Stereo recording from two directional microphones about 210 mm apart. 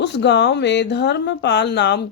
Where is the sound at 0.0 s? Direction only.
55° left (ahead or behind).